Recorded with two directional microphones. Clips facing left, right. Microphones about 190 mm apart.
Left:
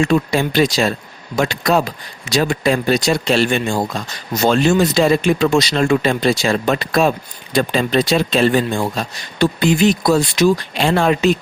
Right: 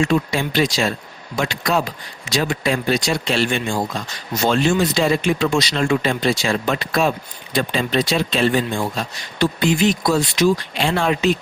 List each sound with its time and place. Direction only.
0.0 s speech: 40° left (ahead or behind)